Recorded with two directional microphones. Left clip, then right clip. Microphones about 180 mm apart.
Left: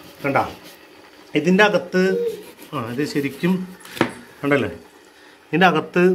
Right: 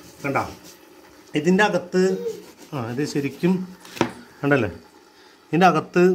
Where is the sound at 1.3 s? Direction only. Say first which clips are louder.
Left 3 dB; 25° right (ahead or behind).